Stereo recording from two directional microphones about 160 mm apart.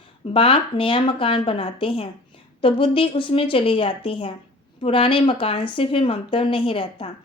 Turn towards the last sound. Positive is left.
turn(degrees=35)  # may be behind; listen again after turning